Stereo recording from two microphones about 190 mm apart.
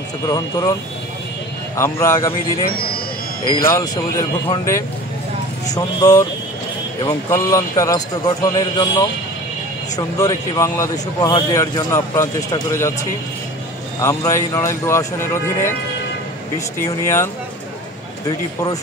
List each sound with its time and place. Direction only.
0.2 s a man's voice: 20° left (ahead or behind)
1.8 s a man's voice: 15° left (ahead or behind)
3.5 s a man's voice: 15° left (ahead or behind)
13.9 s a man's voice: 15° left (ahead or behind)